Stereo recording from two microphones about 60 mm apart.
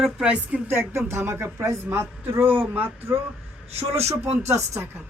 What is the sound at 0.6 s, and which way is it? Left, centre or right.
Speech, right.